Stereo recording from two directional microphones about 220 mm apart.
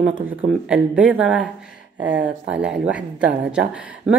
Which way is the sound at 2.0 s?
55° right (ahead or behind).